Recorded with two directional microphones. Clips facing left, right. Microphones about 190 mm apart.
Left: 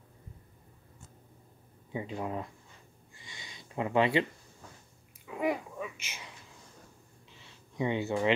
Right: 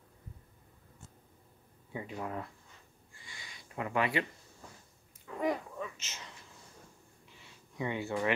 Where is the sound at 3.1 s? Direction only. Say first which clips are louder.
Left 2 dB; 20° left (ahead or behind).